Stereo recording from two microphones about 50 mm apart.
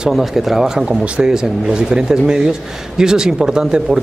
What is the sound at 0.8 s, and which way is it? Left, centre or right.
Speech, right.